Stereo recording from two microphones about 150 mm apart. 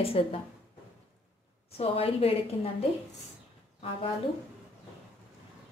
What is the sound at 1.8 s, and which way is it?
Speech, 40° left (ahead or behind).